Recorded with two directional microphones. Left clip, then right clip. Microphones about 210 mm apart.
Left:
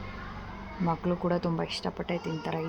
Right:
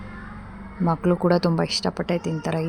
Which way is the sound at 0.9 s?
30° right (ahead or behind).